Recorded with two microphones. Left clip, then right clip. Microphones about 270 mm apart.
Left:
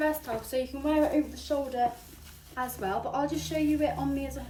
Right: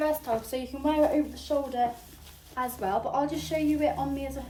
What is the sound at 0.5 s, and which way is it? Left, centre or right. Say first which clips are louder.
A woman's voice: left 4 dB; centre.